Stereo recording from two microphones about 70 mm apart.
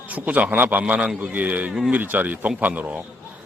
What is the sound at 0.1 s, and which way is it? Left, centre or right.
A man's voice, right.